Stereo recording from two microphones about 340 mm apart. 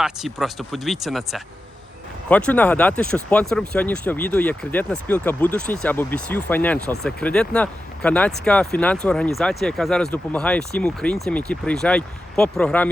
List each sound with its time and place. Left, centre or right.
0.0 s speech: centre